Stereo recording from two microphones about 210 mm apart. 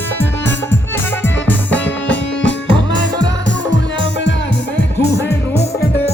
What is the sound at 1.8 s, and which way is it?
Music, 60° left (ahead or behind).